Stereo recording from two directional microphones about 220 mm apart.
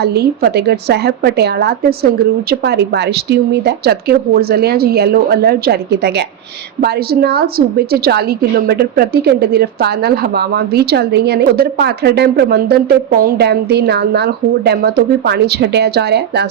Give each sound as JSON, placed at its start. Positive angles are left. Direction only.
{"t": 0.0, "sound": "a woman's voice", "side_deg": -45}